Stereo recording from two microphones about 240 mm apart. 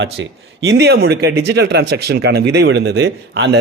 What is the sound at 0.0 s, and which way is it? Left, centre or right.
Speech, right.